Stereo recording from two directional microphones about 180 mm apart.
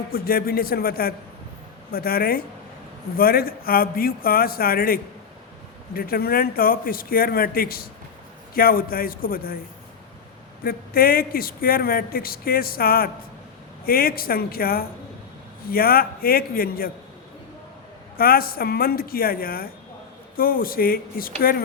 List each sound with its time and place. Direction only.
0.1 s speech: 55° left (ahead or behind)
10.6 s speech: 55° left (ahead or behind)
18.2 s speech: 55° left (ahead or behind)